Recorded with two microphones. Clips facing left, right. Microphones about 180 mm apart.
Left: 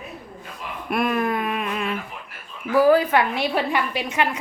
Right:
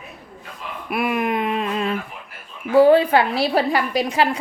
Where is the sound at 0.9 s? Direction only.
10° right (ahead or behind); by 2.0 s 30° right (ahead or behind).